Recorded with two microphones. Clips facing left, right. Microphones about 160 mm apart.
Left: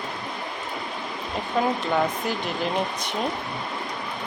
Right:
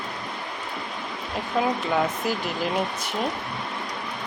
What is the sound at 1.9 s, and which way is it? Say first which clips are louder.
Speech: even; 5° right (ahead or behind).